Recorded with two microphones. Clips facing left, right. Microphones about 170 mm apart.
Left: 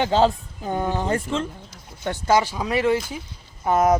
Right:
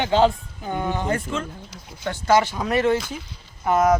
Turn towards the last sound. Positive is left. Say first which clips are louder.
# even
turn(degrees=30)  # may be behind; listen again after turning